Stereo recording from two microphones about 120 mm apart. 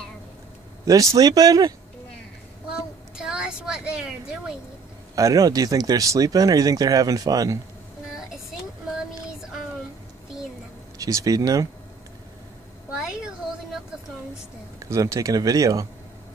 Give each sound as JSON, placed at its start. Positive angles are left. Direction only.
{"t": 0.8, "sound": "speech", "side_deg": -30}
{"t": 3.2, "sound": "a woman's voice", "side_deg": -5}
{"t": 5.1, "sound": "speech", "side_deg": -30}
{"t": 11.0, "sound": "speech", "side_deg": -30}
{"t": 14.8, "sound": "speech", "side_deg": -25}